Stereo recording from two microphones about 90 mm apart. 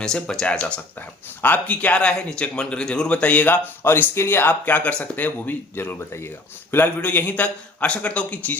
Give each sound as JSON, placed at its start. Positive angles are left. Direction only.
{"t": 0.0, "sound": "speech", "side_deg": 5}